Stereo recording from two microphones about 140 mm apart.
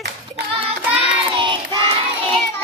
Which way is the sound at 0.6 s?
45° right (ahead or behind).